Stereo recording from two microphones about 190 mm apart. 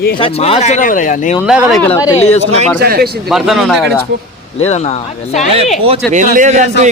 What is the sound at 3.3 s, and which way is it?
Speech, centre (ahead or behind).